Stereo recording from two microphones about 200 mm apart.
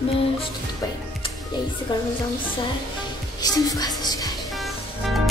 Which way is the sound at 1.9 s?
20° left (ahead or behind).